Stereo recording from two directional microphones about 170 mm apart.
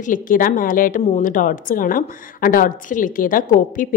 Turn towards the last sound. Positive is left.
turn(degrees=50)  # may be behind; listen again after turning